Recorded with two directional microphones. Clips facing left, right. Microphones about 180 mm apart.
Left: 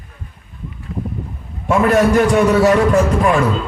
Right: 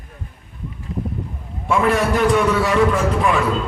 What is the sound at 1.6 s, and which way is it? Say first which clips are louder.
A man's voice: left 4 dB; 45° left (ahead or behind).